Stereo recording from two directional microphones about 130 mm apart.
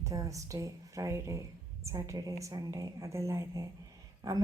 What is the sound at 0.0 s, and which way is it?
A woman's voice, 25° right (ahead or behind).